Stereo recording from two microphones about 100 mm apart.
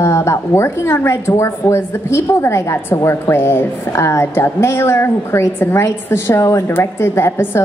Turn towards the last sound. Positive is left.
turn(degrees=25)  # may be behind; listen again after turning